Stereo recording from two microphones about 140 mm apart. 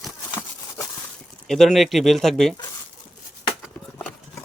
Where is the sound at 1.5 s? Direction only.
Centre (ahead or behind).